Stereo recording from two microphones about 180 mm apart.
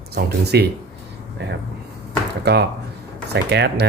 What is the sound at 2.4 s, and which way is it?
Speech, 65° right (ahead or behind).